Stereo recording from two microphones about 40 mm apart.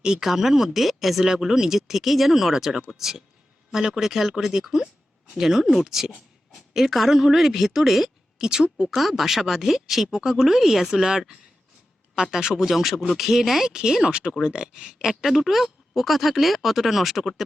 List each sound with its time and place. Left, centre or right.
0.0 s a woman's voice: centre
8.4 s speech: centre
9.0 s speech: centre
12.6 s speech: centre
15.2 s speech: centre